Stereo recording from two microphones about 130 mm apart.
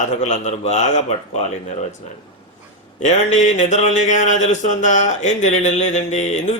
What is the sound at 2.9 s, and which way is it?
Speech, 65° left (ahead or behind).